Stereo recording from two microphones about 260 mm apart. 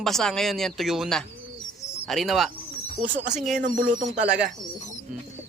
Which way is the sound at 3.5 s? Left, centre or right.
Right.